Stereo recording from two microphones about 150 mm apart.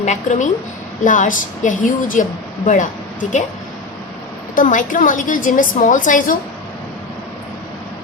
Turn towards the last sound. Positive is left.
turn(degrees=60)  # may be behind; listen again after turning